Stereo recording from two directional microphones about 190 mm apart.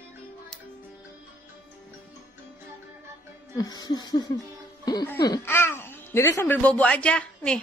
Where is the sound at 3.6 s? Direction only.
20° left (ahead or behind).